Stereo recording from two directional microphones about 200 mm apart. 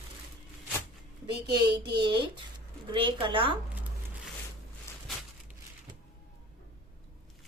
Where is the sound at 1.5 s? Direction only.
20° right (ahead or behind).